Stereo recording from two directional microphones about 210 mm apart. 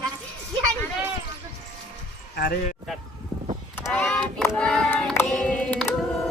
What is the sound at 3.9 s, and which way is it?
Female singing, 5° left (ahead or behind).